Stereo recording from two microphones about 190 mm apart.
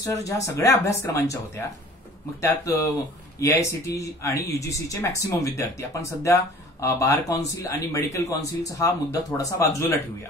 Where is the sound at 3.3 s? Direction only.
15° left (ahead or behind).